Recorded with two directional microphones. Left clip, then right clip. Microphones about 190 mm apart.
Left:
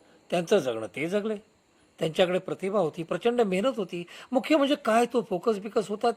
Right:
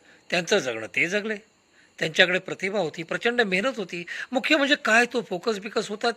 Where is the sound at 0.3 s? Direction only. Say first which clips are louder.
Right 1 dB; 15° left (ahead or behind).